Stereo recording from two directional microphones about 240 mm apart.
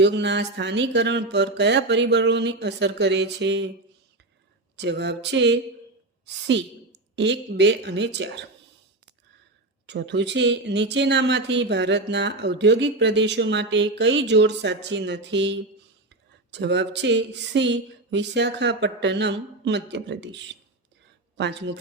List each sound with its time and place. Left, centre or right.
0.0 s speech: right
4.8 s speech: right
9.8 s speech: right